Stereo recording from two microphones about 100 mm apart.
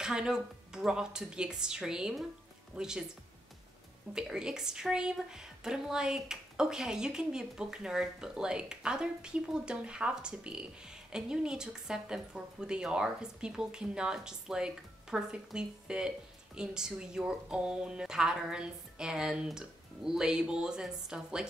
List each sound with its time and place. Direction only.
0.0 s a woman's voice: 5° right (ahead or behind)
4.1 s a woman's voice: 5° right (ahead or behind)